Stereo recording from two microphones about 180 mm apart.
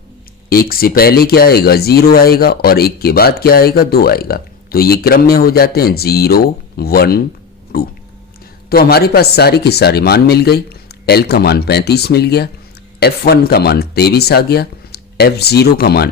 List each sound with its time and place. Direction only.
0.5 s speech: 55° left (ahead or behind)